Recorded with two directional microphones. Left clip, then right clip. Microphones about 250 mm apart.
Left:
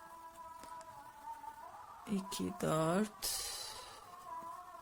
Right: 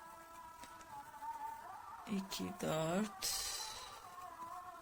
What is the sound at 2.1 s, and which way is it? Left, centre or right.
Speech, left.